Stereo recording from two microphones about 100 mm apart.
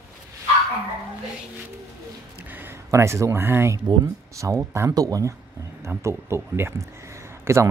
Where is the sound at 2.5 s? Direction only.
25° right (ahead or behind).